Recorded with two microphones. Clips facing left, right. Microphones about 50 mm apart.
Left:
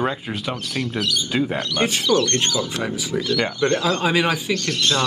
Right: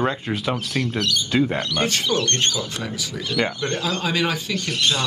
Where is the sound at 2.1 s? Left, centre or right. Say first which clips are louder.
Left 3 dB; centre.